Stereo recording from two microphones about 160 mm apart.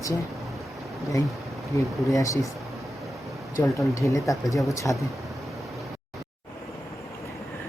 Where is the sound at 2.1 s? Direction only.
20° left (ahead or behind).